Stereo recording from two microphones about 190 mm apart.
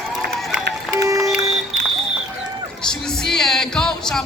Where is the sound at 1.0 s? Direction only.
15° right (ahead or behind).